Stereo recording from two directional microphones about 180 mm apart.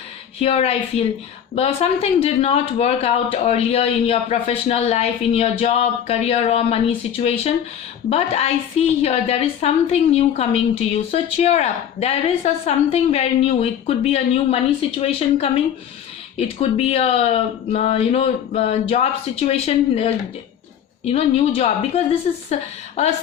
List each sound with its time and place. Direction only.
0.3 s a woman's voice: 35° left (ahead or behind)